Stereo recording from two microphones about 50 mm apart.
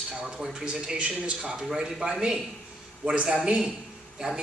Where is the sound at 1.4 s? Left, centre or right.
Centre.